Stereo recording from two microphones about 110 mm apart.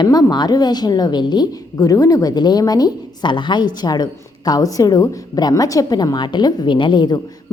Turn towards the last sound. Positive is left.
turn(degrees=45)  # may be behind; listen again after turning